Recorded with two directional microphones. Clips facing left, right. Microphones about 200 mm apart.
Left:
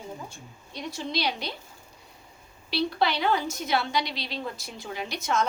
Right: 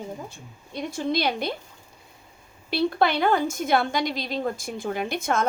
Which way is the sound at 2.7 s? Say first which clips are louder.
Right 4 dB; 50° right (ahead or behind).